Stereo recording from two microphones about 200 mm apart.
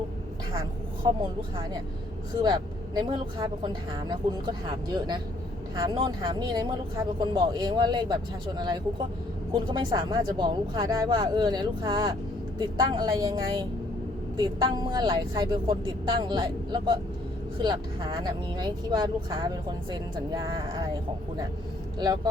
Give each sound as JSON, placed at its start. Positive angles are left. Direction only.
{"t": 1.0, "sound": "speech", "side_deg": -20}
{"t": 2.3, "sound": "speech", "side_deg": -20}